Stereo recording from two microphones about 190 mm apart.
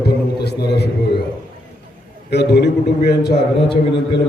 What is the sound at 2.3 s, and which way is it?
A man's voice, 60° left (ahead or behind).